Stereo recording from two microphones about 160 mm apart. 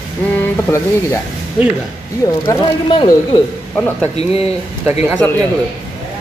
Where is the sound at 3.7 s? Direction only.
10° left (ahead or behind).